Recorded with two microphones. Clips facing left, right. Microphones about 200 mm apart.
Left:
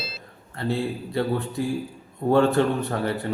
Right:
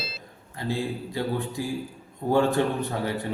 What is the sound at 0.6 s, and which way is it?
Speech, 15° right (ahead or behind).